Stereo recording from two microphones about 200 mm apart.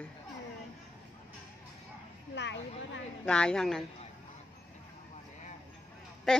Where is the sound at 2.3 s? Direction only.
60° left (ahead or behind).